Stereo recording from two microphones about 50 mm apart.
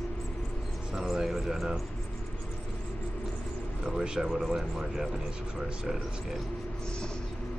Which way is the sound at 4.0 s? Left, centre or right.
Centre.